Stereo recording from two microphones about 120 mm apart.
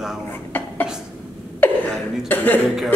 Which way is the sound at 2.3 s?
15° left (ahead or behind).